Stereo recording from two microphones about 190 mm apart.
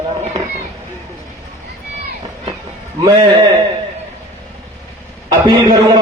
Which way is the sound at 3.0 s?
20° right (ahead or behind).